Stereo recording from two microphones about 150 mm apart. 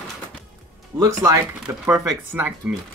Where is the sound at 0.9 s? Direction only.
30° right (ahead or behind).